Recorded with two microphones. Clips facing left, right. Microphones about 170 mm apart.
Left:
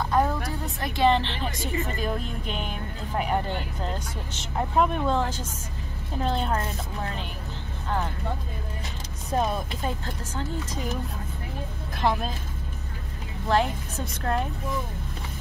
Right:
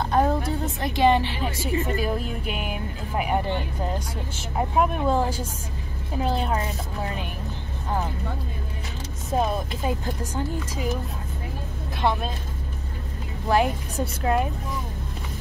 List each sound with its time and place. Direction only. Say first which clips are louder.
0.1 s a sound: right 3 dB; 25° right (ahead or behind)
0.7 s speech: right 2 dB; 15° right (ahead or behind)
9.3 s speech: right 2 dB; 5° right (ahead or behind)
12.0 s speech: right 1 dB; centre (ahead or behind)
13.5 s speech: right 2 dB; 10° right (ahead or behind)